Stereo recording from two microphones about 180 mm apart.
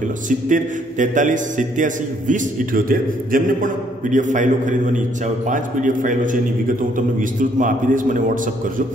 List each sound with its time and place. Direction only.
0.5 s a man's voice: 45° right (ahead or behind)